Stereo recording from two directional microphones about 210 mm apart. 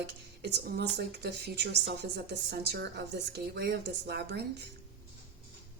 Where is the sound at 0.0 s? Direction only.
55° right (ahead or behind).